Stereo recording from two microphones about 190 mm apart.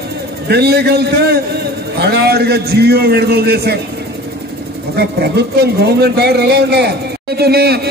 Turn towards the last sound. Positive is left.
turn(degrees=-55)  # may be behind; listen again after turning